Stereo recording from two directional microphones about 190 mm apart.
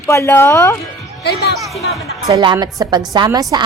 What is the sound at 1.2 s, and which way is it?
Speech, 60° left (ahead or behind).